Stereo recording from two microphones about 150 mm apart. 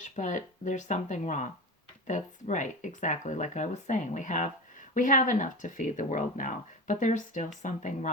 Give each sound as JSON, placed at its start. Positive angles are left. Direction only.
{"t": 0.0, "sound": "speech", "side_deg": 55}